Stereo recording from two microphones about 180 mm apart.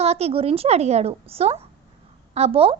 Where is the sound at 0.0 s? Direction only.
35° right (ahead or behind).